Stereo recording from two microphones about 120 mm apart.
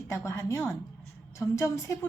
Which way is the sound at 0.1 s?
25° left (ahead or behind).